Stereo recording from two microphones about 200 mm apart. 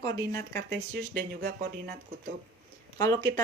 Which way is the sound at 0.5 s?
55° right (ahead or behind).